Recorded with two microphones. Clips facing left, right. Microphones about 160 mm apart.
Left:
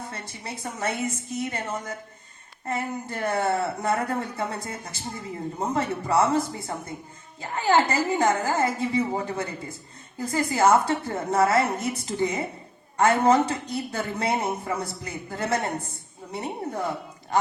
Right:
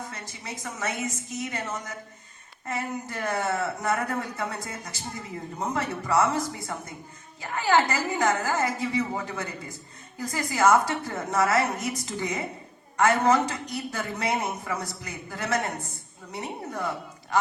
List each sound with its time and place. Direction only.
0.0 s a woman's voice: 30° left (ahead or behind)